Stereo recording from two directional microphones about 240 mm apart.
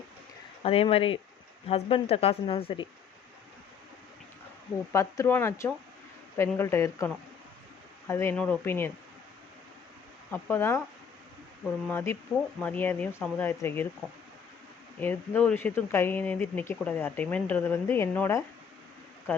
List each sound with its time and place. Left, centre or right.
0.6 s a woman's voice: left
4.9 s speech: centre
10.3 s speech: centre
11.9 s speech: centre
14.9 s speech: centre